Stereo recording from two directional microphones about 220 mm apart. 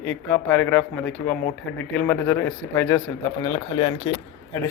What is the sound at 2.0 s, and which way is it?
Speech, 10° left (ahead or behind).